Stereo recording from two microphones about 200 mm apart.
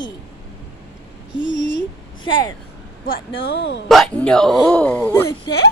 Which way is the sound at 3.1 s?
55° left (ahead or behind).